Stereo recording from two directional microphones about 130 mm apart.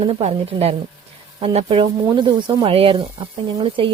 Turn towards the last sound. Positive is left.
turn(degrees=-40)  # may be behind; listen again after turning